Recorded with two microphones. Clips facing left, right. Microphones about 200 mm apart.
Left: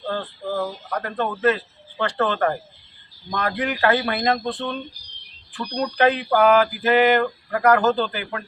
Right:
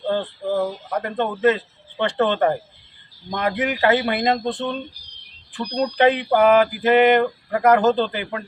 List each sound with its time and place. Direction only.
0.1 s mantra: 20° right (ahead or behind)